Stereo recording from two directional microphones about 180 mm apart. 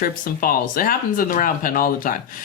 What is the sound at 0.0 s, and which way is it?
Speech, 55° left (ahead or behind).